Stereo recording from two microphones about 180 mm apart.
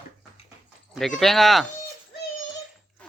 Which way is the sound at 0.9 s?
Centre (ahead or behind).